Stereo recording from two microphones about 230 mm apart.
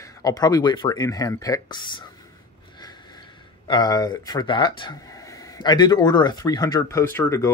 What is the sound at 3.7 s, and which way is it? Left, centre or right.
Speech, centre.